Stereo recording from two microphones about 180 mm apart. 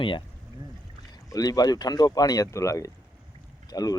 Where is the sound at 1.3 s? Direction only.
20° left (ahead or behind).